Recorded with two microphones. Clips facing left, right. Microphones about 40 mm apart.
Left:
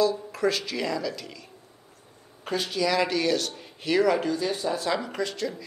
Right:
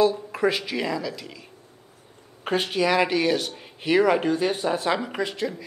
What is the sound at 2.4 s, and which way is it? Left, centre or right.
A man's voice, right.